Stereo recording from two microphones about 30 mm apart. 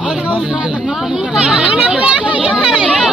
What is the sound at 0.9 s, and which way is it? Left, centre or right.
Speech, right.